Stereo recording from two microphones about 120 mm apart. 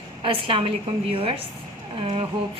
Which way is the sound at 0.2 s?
45° right (ahead or behind).